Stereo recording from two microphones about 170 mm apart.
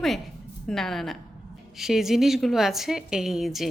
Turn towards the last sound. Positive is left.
turn(degrees=0)  # may be behind; listen again after turning